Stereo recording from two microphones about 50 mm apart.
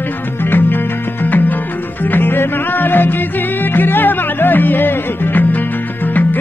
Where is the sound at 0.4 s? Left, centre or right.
Left.